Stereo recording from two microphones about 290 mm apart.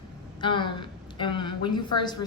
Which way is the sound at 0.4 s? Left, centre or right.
Centre.